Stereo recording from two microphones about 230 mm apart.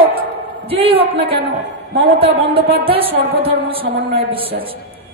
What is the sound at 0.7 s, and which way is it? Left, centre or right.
Speech, right.